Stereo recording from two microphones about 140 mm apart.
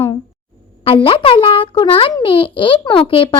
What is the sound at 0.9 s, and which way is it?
A child's voice, 40° left (ahead or behind).